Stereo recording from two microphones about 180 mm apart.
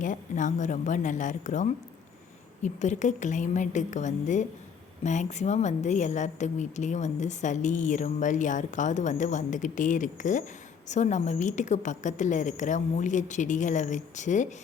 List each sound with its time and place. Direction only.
0.0 s a woman's voice: 45° left (ahead or behind)